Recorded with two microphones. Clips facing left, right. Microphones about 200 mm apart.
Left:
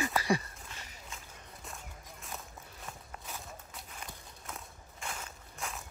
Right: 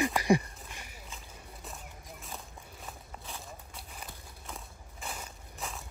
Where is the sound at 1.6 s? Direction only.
Centre (ahead or behind).